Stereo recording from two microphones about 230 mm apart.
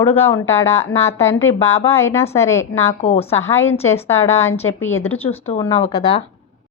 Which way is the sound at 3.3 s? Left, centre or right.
Centre.